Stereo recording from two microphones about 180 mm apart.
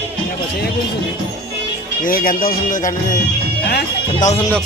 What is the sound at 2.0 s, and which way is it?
Speech, 50° left (ahead or behind).